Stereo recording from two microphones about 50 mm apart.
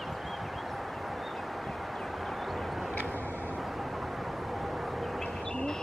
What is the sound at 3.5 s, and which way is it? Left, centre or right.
Vehicle, centre.